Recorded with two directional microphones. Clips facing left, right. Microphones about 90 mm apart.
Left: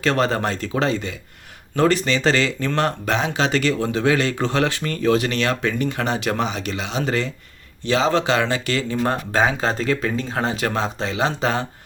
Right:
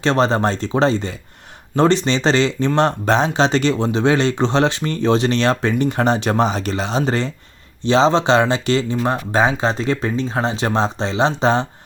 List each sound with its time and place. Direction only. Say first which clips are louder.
0.0 s speech: right 4 dB; 25° right (ahead or behind)